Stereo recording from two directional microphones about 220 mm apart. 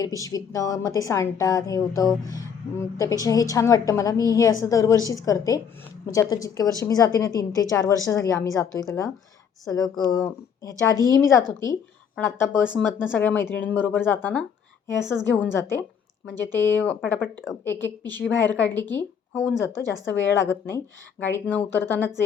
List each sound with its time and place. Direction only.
0.0 s a woman's voice: 15° left (ahead or behind)
18.2 s a woman's voice: 55° left (ahead or behind)
18.5 s a woman's voice: 10° left (ahead or behind)
19.7 s a woman's voice: 55° left (ahead or behind)
20.7 s a woman's voice: 10° left (ahead or behind)